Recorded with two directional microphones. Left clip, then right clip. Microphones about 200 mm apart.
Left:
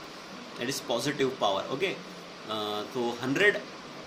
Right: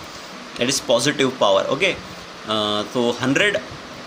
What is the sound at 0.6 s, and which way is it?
Speech, 55° right (ahead or behind).